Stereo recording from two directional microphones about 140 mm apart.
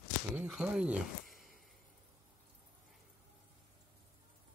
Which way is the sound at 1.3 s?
90° right.